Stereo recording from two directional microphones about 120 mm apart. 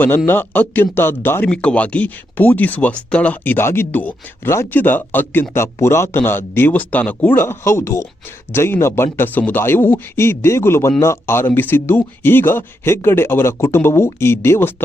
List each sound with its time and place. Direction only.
0.3 s speech: 15° left (ahead or behind)